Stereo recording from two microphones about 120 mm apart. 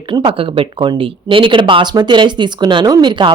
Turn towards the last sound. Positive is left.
turn(degrees=-40)  # may be behind; listen again after turning